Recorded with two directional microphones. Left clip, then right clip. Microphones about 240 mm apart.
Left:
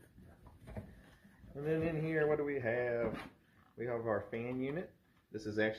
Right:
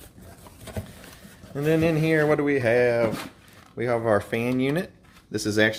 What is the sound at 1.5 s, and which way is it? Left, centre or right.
Speech, right.